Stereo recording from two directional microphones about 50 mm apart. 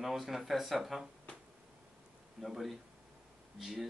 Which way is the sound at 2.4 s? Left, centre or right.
Centre.